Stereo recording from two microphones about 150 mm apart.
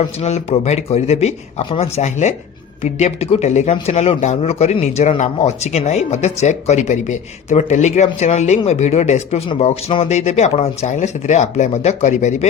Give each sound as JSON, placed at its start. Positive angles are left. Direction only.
{"t": 0.2, "sound": "speech", "side_deg": 45}